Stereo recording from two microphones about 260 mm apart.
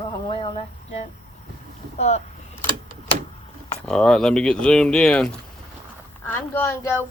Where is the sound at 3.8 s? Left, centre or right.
Centre.